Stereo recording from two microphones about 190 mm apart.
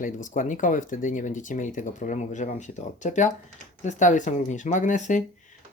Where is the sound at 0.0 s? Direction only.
45° left (ahead or behind).